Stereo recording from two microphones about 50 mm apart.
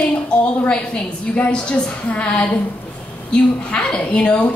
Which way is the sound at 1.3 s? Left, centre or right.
Left.